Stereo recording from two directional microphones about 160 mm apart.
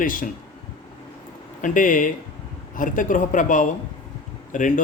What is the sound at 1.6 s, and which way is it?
Speech, 55° left (ahead or behind).